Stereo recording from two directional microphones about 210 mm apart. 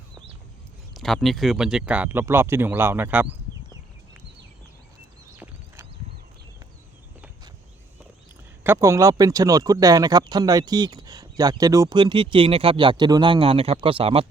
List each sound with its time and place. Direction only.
0.9 s speech: centre (ahead or behind)
5.4 s horse: 10° right (ahead or behind)
8.6 s speech: 15° right (ahead or behind)